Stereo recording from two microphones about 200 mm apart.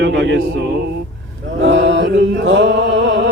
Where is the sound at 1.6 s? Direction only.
65° right (ahead or behind).